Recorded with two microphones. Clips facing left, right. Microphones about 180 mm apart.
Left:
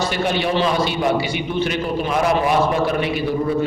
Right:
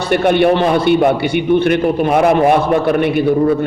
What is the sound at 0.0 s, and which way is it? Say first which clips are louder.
A man's voice: right 9 dB; 60° right (ahead or behind).